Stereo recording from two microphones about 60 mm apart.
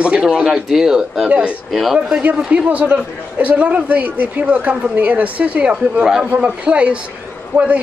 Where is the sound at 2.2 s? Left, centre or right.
Right.